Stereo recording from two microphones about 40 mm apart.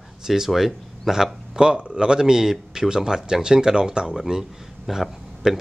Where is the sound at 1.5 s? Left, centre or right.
Right.